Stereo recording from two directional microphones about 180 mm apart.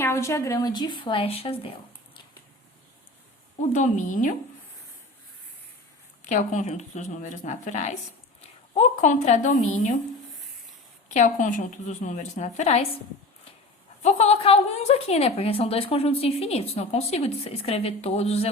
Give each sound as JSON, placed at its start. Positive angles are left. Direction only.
{"t": 0.0, "sound": "a woman's voice", "side_deg": 15}
{"t": 3.7, "sound": "a woman's voice", "side_deg": 40}
{"t": 6.2, "sound": "a woman's voice", "side_deg": 45}
{"t": 11.1, "sound": "a woman's voice", "side_deg": 40}
{"t": 14.0, "sound": "a woman's voice", "side_deg": 35}